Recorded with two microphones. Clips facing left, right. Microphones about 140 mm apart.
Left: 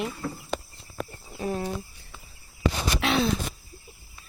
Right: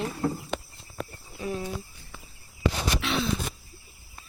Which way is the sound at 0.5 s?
40° left (ahead or behind).